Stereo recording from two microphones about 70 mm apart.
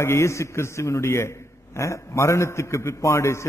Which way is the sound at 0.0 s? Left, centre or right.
Left.